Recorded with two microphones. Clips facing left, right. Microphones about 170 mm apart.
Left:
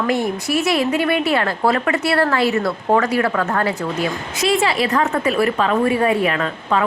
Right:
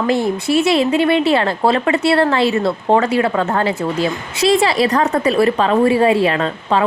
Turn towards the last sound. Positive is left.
turn(degrees=-30)  # may be behind; listen again after turning